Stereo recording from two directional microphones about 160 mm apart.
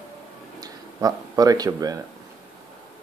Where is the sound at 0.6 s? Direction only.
20° right (ahead or behind).